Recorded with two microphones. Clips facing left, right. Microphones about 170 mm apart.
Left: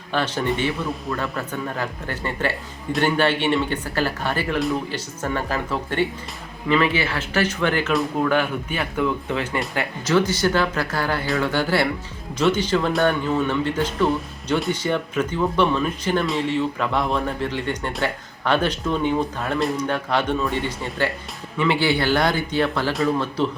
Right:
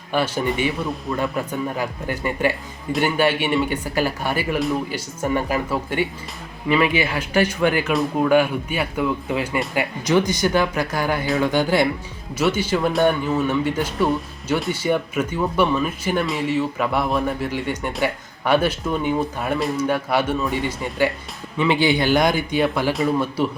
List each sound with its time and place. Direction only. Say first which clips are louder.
0.1 s speech: right 1 dB; 10° right (ahead or behind)